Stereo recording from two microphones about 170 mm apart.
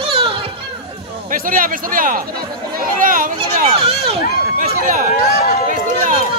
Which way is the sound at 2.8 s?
55° right (ahead or behind).